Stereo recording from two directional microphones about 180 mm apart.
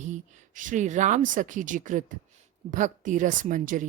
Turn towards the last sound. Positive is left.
turn(degrees=-50)  # may be behind; listen again after turning